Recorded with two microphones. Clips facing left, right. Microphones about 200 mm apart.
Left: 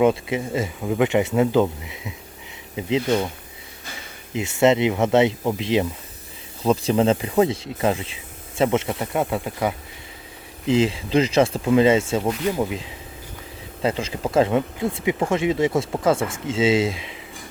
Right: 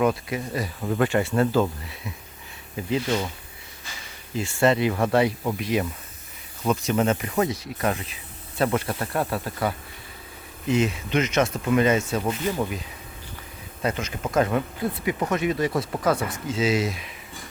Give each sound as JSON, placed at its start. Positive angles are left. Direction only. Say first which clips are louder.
{"t": 0.0, "sound": "speech", "louder": "left 4 dB", "side_deg": 25}
{"t": 4.4, "sound": "speech", "louder": "left 3 dB", "side_deg": 20}
{"t": 13.8, "sound": "speech", "louder": "left 4 dB", "side_deg": 30}